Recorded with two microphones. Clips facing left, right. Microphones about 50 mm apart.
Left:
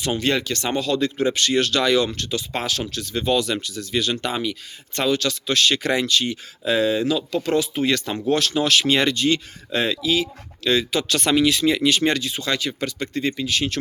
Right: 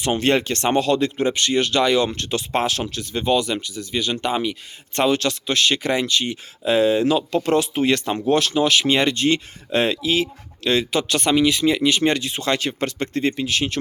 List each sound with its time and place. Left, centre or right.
0.0 s speech: right
1.2 s speech: right
2.2 s speech: right; by 4.5 s centre
4.9 s speech: right
9.1 s speech: right
11.1 s speech: right
13.3 s speech: right